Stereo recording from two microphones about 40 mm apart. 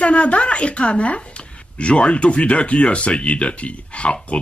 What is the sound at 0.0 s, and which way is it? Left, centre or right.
Speech, left.